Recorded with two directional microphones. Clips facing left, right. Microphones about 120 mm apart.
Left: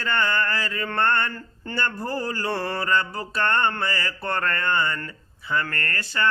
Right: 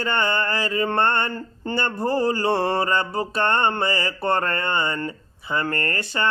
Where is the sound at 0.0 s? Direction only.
20° right (ahead or behind).